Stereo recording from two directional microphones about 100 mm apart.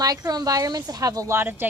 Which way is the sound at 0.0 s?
40° right (ahead or behind).